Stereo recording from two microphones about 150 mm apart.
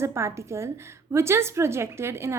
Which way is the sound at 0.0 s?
20° right (ahead or behind).